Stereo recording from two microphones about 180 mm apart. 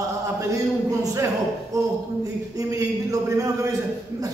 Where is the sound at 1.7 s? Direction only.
20° right (ahead or behind).